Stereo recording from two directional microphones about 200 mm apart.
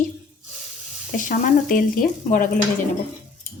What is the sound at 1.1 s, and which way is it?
Speech, 40° left (ahead or behind).